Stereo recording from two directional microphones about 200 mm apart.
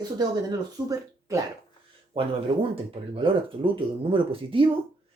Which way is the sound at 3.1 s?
25° right (ahead or behind).